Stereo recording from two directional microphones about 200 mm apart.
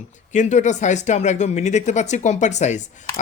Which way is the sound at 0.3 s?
35° left (ahead or behind).